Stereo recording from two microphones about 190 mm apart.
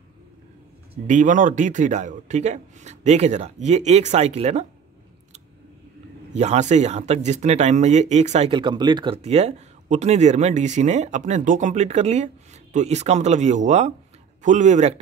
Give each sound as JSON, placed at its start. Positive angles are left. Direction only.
{"t": 1.0, "sound": "speech", "side_deg": -40}
{"t": 6.3, "sound": "speech", "side_deg": -35}